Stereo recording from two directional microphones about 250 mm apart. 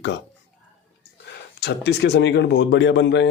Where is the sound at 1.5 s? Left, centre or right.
Left.